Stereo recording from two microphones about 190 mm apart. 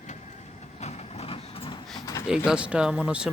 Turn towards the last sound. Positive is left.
turn(degrees=-5)  # may be behind; listen again after turning